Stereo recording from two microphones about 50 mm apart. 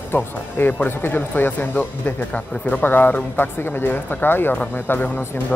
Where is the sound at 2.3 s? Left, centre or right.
Left.